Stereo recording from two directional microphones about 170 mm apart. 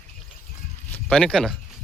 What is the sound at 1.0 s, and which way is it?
Speech, 5° left (ahead or behind).